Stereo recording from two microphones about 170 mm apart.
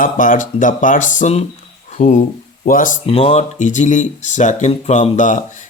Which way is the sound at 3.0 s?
35° left (ahead or behind).